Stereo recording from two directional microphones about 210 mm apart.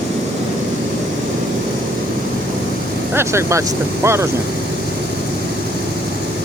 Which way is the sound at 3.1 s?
10° right (ahead or behind).